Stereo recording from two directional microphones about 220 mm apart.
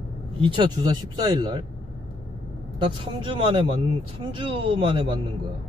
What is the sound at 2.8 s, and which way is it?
Speech, 25° right (ahead or behind).